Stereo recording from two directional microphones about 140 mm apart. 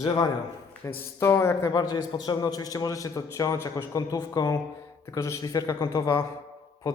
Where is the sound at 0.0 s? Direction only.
30° left (ahead or behind).